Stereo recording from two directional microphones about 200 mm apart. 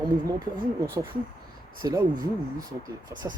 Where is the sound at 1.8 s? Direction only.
20° right (ahead or behind).